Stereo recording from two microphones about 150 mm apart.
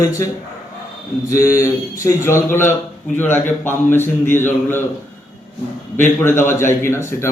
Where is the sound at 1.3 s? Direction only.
20° left (ahead or behind).